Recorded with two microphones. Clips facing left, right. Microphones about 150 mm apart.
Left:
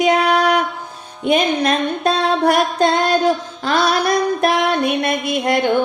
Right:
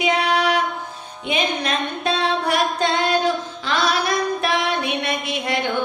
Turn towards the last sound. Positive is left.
turn(degrees=50)  # may be behind; listen again after turning